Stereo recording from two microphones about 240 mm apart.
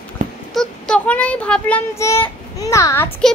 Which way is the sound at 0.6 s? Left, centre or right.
Centre.